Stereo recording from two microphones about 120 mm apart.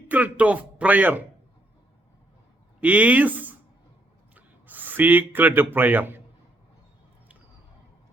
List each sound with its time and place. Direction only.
0.1 s speech: 10° right (ahead or behind)
2.8 s speech: 10° right (ahead or behind)